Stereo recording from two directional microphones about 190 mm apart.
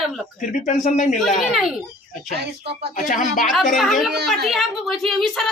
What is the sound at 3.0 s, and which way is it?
Speech, 45° left (ahead or behind).